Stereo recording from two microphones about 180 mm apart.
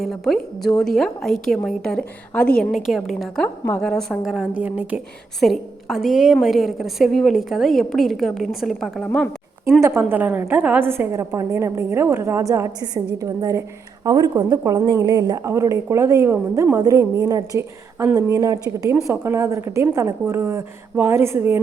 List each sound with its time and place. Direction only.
0.0 s a woman's voice: centre (ahead or behind)
9.8 s a woman's voice: 15° right (ahead or behind)